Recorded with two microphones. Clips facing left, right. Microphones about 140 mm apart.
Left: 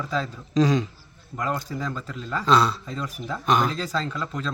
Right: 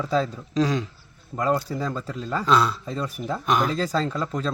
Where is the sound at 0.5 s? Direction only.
5° right (ahead or behind).